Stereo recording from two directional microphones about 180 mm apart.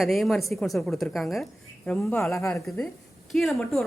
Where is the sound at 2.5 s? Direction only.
Centre (ahead or behind).